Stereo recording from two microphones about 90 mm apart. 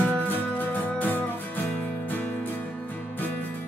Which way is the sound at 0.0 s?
15° left (ahead or behind).